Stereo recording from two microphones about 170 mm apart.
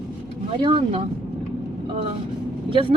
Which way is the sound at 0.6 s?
30° right (ahead or behind).